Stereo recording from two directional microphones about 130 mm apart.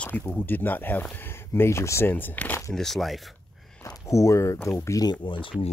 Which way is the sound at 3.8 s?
25° left (ahead or behind).